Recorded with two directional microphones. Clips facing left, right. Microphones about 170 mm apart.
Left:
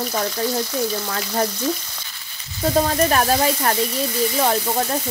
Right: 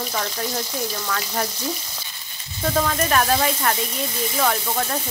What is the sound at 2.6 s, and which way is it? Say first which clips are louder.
Speech: left 4 dB; 30° left (ahead or behind).